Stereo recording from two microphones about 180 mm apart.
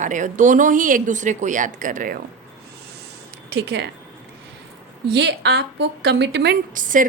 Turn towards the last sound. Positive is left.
turn(degrees=-45)  # may be behind; listen again after turning